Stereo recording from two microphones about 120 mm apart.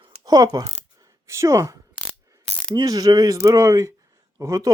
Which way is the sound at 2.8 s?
35° right (ahead or behind).